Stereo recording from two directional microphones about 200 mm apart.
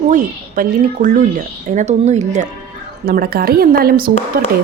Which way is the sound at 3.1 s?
50° right (ahead or behind).